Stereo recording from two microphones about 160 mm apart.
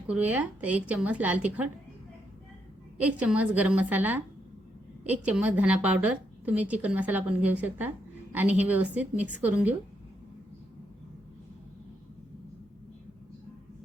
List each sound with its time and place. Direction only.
0.1 s a woman's voice: 10° right (ahead or behind)
3.0 s a woman's voice: 10° right (ahead or behind)